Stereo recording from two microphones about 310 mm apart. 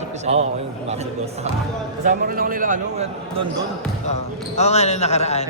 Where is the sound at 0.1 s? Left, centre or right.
Right.